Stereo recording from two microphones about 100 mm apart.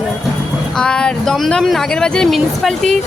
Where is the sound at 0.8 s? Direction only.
10° left (ahead or behind).